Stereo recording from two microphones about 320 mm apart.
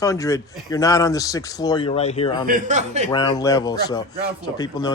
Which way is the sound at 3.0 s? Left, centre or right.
Centre.